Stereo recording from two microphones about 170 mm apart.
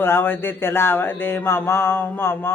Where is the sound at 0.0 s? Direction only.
15° left (ahead or behind).